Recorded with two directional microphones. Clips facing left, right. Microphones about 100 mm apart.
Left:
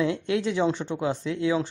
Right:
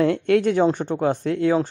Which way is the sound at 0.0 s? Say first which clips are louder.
Right 7 dB; 55° right (ahead or behind).